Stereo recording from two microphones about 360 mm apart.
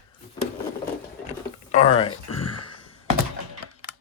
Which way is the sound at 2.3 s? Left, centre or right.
Left.